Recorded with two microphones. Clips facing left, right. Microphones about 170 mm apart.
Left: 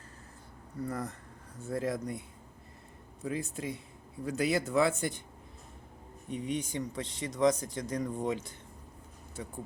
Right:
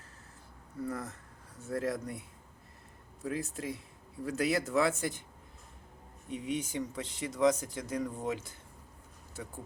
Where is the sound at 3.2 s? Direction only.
Centre (ahead or behind).